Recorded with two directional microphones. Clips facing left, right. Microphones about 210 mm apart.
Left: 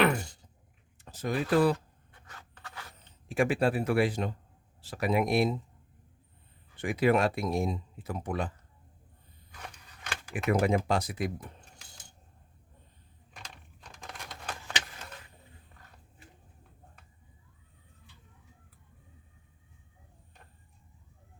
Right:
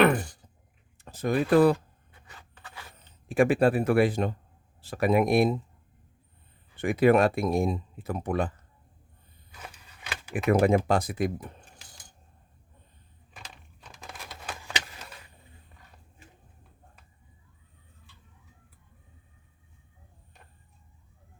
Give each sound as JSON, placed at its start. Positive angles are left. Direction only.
{"t": 0.0, "sound": "a sound", "side_deg": -55}
{"t": 0.9, "sound": "speech", "side_deg": -55}
{"t": 3.2, "sound": "a man's voice", "side_deg": -55}
{"t": 6.8, "sound": "speech", "side_deg": -55}
{"t": 9.6, "sound": "a sound", "side_deg": -5}
{"t": 10.3, "sound": "a man's voice", "side_deg": -50}
{"t": 14.0, "sound": "crumpling", "side_deg": -5}